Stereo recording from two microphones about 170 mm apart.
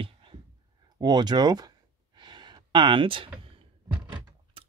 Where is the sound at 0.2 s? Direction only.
30° right (ahead or behind).